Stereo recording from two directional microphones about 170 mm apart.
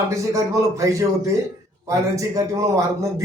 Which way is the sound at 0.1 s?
20° right (ahead or behind).